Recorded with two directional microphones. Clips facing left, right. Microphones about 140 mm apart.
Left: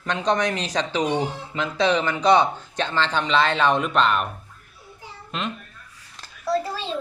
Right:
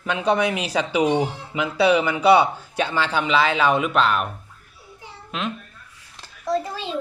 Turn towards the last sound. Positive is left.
turn(degrees=-20)  # may be behind; listen again after turning